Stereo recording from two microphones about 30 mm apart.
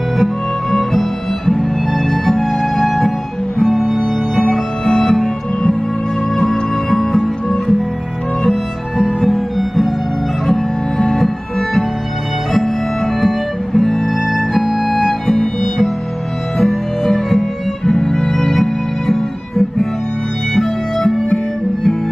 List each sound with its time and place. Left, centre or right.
1.4 s music: centre
5.0 s music: centre
9.2 s music: centre
11.0 s music: centre
13.2 s music: centre
14.9 s music: centre
16.5 s music: centre
18.0 s music: centre
18.5 s music: centre
19.1 s guitar: centre
20.5 s music: centre